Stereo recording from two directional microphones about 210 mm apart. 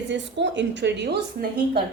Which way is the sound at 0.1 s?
60° right (ahead or behind).